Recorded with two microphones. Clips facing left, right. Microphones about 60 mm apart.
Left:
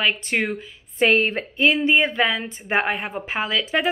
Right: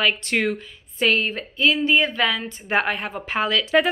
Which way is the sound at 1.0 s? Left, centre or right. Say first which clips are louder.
Left 3 dB; left.